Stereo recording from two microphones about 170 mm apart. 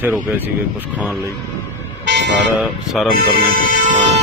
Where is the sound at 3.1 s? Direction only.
55° right (ahead or behind).